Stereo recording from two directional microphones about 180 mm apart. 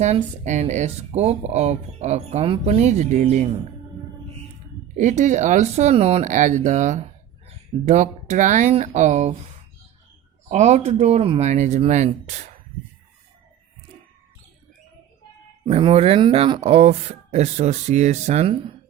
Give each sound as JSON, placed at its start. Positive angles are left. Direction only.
{"t": 0.0, "sound": "speech", "side_deg": -40}
{"t": 4.9, "sound": "speech", "side_deg": -40}
{"t": 10.5, "sound": "speech", "side_deg": -40}
{"t": 15.6, "sound": "speech", "side_deg": -30}